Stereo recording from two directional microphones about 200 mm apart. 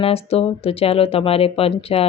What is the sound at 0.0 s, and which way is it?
Speech, 30° left (ahead or behind).